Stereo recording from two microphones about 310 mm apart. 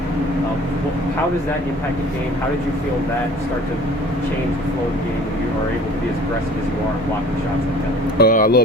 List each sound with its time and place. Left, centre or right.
8.2 s speech: left